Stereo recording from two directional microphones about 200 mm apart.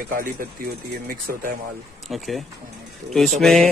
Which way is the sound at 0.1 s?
45° right (ahead or behind).